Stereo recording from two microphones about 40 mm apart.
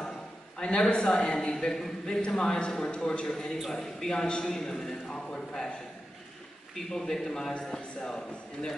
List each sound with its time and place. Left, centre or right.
0.6 s a woman's voice: left
1.5 s a man's voice: centre
6.7 s a man's voice: centre